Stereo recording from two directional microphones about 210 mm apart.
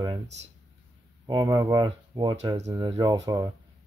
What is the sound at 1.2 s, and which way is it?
Speech, 20° right (ahead or behind).